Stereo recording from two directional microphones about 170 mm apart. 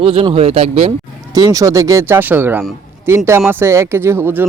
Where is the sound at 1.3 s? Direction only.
20° right (ahead or behind).